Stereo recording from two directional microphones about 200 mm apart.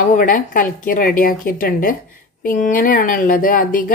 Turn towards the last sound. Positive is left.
turn(degrees=45)  # may be behind; listen again after turning